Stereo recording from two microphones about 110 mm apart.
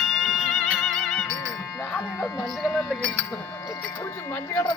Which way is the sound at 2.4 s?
Centre (ahead or behind).